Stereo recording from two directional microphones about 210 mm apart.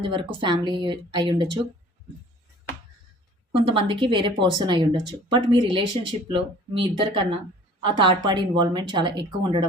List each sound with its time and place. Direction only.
0.0 s speech: 25° right (ahead or behind)
3.6 s speech: 25° right (ahead or behind)